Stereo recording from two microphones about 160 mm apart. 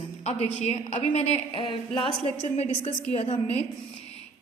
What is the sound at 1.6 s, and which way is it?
Speech, 30° left (ahead or behind).